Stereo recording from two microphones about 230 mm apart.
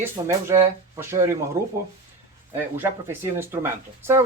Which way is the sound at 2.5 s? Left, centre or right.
Centre.